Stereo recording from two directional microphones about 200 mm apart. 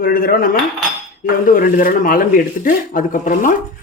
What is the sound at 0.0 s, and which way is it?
A man's voice, 45° left (ahead or behind).